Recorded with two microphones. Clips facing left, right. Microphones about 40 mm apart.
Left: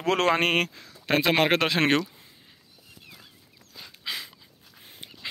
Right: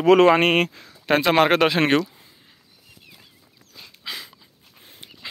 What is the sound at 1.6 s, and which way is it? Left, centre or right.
Speech, centre.